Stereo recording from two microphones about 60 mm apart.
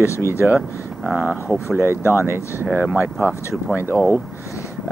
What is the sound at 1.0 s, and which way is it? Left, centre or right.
Speech, right.